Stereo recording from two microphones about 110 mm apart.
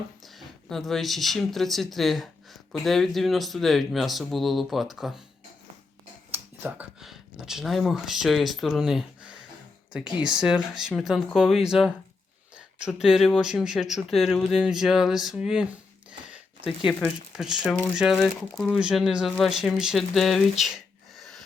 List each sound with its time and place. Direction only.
0.3 s speech: centre (ahead or behind)
6.3 s a sound: 20° right (ahead or behind)
7.0 s speech: 5° right (ahead or behind)
21.2 s gasp: centre (ahead or behind)